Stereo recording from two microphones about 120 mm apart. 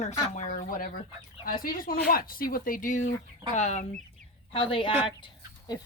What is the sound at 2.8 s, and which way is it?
Speech, 90° left.